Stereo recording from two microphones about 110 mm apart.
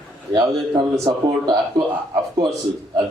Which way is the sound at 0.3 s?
35° right (ahead or behind).